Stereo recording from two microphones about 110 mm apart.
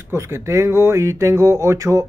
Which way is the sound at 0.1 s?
25° right (ahead or behind).